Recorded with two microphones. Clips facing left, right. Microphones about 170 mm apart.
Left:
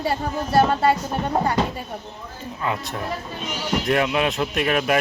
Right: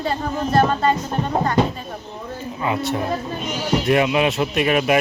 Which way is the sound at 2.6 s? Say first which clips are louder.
Right 5 dB; 5° right (ahead or behind).